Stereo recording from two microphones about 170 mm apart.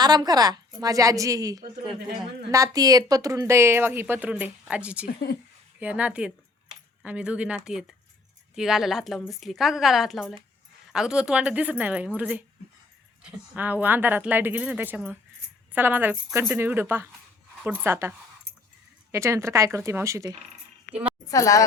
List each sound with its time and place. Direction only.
0.0 s a woman's voice: 25° right (ahead or behind); by 5.0 s 5° right (ahead or behind)
5.0 s a woman's voice: 65° left (ahead or behind)
5.8 s a woman's voice: 10° right (ahead or behind)
19.1 s speech: 15° right (ahead or behind)
20.9 s a sound: 10° right (ahead or behind)
21.2 s a woman's voice: 20° left (ahead or behind)